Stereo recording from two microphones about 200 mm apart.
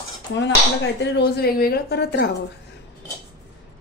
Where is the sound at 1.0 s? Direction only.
50° left (ahead or behind).